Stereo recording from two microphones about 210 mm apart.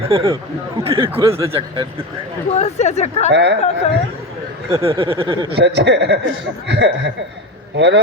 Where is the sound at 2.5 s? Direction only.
30° left (ahead or behind).